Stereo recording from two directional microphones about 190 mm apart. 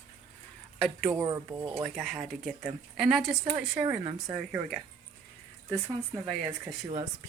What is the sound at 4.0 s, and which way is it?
Speech, 25° right (ahead or behind).